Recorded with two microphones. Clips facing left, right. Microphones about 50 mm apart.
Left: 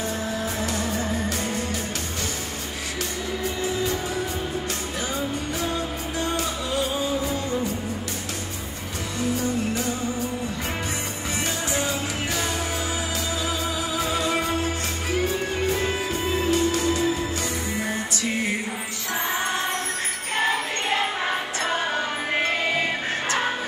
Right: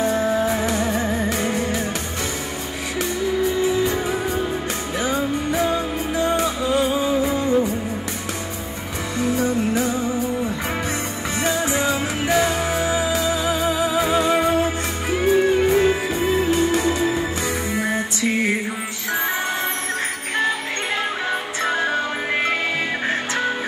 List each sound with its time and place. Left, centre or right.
0.0 s music: right
5.0 s music: right
9.4 s music: right
11.4 s music: right